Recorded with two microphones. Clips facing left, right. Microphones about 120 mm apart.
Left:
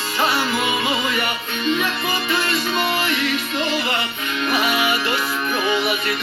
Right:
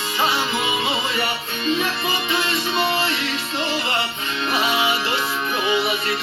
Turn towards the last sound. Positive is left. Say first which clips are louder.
# left 1 dB
turn(degrees=-25)  # may be behind; listen again after turning